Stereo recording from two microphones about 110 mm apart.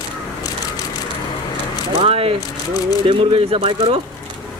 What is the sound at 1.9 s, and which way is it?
Speech, 65° right (ahead or behind).